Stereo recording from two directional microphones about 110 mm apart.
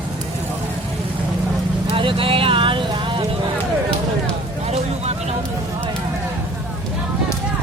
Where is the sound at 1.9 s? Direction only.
55° right (ahead or behind).